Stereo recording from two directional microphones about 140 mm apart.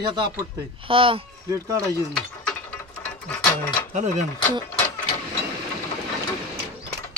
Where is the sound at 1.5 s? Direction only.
25° right (ahead or behind).